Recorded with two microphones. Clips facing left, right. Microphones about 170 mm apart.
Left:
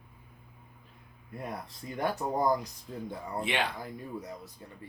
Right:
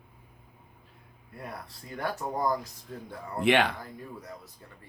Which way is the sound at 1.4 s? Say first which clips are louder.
Left 2 dB; 20° left (ahead or behind).